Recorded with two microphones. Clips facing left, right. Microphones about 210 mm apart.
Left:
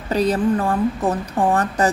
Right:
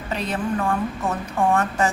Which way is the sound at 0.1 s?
40° left (ahead or behind).